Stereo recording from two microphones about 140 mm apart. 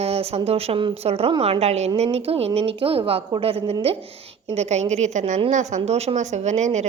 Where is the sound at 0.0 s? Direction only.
45° right (ahead or behind).